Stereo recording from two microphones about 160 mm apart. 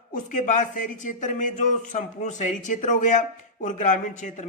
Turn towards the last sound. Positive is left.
turn(degrees=50)  # may be behind; listen again after turning